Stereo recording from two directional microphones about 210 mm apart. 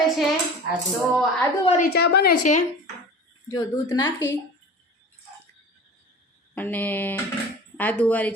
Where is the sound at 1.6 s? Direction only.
30° left (ahead or behind).